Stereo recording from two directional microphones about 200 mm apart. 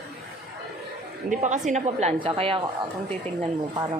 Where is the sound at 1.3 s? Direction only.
40° right (ahead or behind).